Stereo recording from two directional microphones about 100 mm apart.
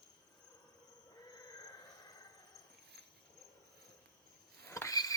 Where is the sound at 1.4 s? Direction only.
40° left (ahead or behind).